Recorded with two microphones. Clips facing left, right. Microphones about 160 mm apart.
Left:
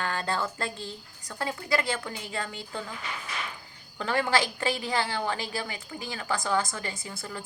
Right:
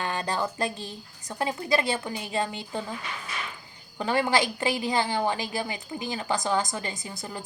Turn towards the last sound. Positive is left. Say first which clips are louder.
# right 2 dB
turn(degrees=-20)  # may be behind; listen again after turning